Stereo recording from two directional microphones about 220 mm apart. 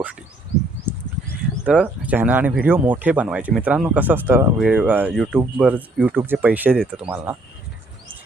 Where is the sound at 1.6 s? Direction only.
5° right (ahead or behind).